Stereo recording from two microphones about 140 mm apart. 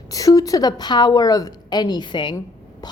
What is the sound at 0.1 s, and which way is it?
A woman's voice, 25° left (ahead or behind).